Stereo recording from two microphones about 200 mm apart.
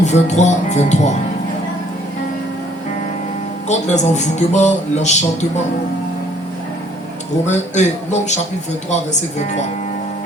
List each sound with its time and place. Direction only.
0.0 s speech: 35° left (ahead or behind)
3.7 s speech: 35° left (ahead or behind)
7.4 s speech: 35° left (ahead or behind)